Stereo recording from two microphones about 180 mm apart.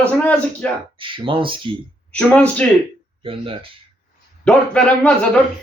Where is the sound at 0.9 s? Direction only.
30° right (ahead or behind).